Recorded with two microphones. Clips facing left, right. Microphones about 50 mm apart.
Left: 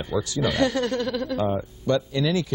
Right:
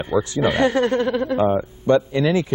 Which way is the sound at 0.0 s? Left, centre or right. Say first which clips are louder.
Right 5 dB; right.